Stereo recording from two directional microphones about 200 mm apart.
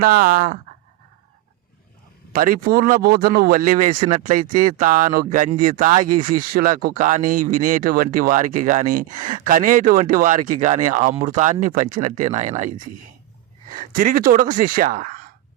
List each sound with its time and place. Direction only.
0.0 s speech: 45° right (ahead or behind)
2.3 s speech: 45° right (ahead or behind)